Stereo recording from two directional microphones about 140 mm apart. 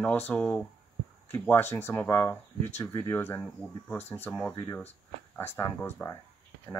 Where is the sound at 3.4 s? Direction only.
5° left (ahead or behind).